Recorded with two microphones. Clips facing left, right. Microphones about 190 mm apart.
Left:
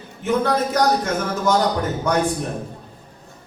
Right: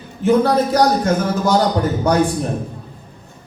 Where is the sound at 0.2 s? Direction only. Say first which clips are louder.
Right 6 dB; 35° right (ahead or behind).